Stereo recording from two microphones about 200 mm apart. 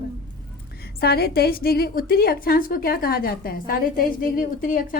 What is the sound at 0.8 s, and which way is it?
A woman's voice, 50° left (ahead or behind).